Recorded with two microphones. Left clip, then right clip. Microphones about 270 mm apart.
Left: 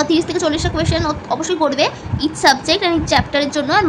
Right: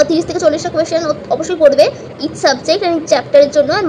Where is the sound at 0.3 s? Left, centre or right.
Centre.